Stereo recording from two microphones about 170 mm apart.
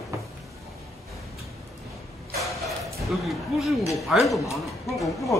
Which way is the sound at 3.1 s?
Centre (ahead or behind).